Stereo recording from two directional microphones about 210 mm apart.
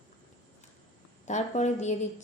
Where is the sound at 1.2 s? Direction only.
35° left (ahead or behind).